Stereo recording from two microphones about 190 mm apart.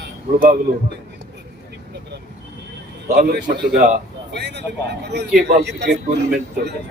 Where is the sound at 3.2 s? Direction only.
60° right (ahead or behind).